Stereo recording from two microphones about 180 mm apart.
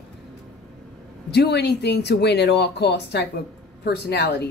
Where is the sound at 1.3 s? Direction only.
65° left (ahead or behind).